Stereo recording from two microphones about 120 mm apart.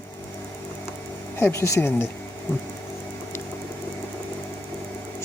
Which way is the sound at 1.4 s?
20° left (ahead or behind).